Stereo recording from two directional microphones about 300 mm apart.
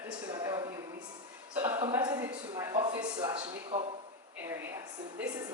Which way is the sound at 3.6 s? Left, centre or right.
Centre.